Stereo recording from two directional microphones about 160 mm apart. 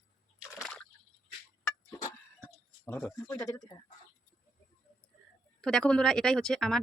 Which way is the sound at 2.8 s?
15° left (ahead or behind).